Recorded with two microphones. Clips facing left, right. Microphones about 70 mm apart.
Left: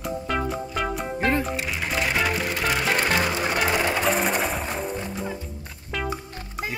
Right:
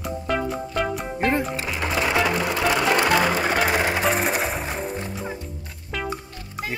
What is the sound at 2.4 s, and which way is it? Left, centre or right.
Music, right.